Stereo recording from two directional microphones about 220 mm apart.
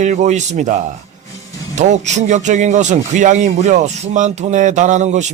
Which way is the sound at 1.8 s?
30° right (ahead or behind).